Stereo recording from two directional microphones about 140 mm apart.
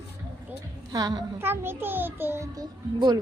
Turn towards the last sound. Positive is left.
turn(degrees=-30)  # may be behind; listen again after turning